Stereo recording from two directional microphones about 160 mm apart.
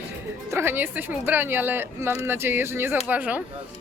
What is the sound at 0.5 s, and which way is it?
A woman's voice, 15° right (ahead or behind).